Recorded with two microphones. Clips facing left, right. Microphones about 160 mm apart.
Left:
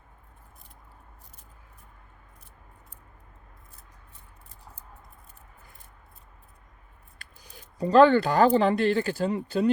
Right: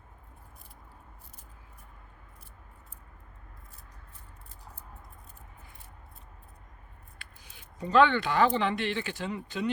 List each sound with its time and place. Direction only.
7.2 s speech: 40° left (ahead or behind)